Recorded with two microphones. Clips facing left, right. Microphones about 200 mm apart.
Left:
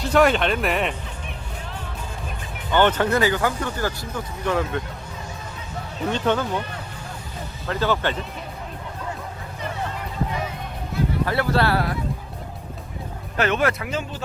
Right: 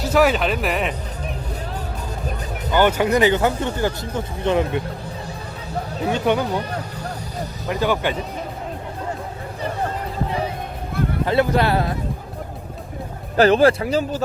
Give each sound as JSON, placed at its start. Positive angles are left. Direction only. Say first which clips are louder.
{"t": 0.0, "sound": "speech", "louder": "right 1 dB", "side_deg": -5}
{"t": 2.7, "sound": "speech", "louder": "right 2 dB", "side_deg": -10}
{"t": 6.1, "sound": "speech", "louder": "right 2 dB", "side_deg": -10}
{"t": 7.7, "sound": "speech", "louder": "right 2 dB", "side_deg": -15}
{"t": 11.3, "sound": "speech", "louder": "right 5 dB", "side_deg": -20}
{"t": 13.3, "sound": "speech", "louder": "right 8 dB", "side_deg": -35}